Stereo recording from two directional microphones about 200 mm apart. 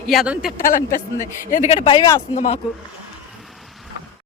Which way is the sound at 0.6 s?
45° left (ahead or behind).